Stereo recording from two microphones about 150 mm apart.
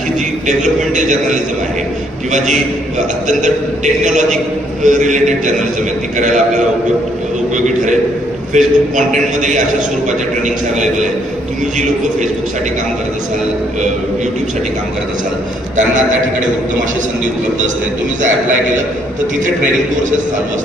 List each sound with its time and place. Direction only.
0.4 s a man's voice: 55° right (ahead or behind)
4.0 s a man's voice: 55° right (ahead or behind)
8.5 s a man's voice: 55° right (ahead or behind)